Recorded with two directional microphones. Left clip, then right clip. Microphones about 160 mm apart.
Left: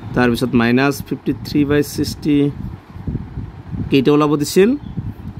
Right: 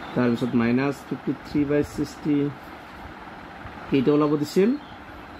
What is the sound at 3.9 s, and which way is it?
Speech, 70° left (ahead or behind).